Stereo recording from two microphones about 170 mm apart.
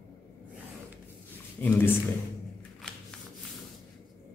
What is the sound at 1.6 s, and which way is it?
Speech, 10° left (ahead or behind).